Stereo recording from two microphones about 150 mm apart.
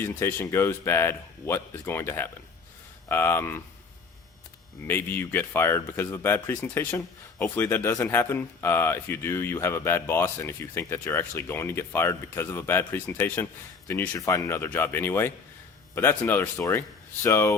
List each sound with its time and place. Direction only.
0.0 s speech: 15° left (ahead or behind)
4.9 s speech: 15° left (ahead or behind)